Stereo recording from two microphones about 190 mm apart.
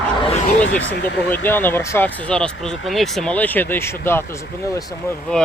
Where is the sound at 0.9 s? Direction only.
65° left (ahead or behind).